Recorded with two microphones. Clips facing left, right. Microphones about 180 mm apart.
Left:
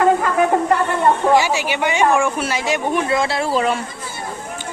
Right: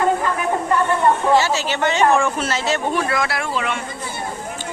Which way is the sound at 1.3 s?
15° left (ahead or behind).